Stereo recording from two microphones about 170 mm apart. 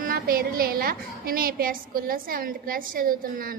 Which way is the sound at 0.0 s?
60° right (ahead or behind).